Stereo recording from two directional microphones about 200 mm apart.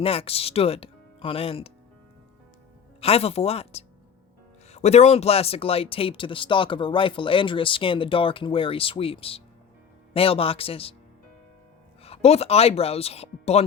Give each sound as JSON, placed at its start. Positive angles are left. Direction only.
{"t": 0.0, "sound": "speech", "side_deg": 30}
{"t": 3.0, "sound": "speech", "side_deg": 30}
{"t": 12.0, "sound": "speech", "side_deg": 30}